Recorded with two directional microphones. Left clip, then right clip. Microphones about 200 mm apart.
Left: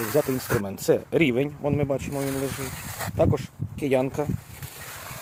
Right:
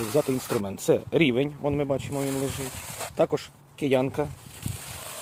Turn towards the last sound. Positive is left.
turn(degrees=0)  # may be behind; listen again after turning